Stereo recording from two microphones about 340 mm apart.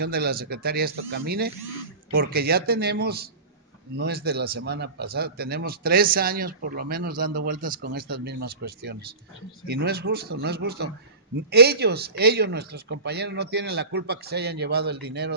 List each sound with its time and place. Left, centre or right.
0.0 s a man's voice: right